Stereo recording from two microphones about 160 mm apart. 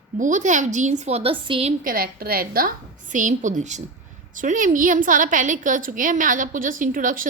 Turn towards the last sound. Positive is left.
turn(degrees=-60)  # may be behind; listen again after turning